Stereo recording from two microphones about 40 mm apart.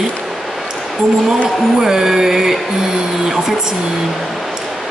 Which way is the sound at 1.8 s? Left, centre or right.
Centre.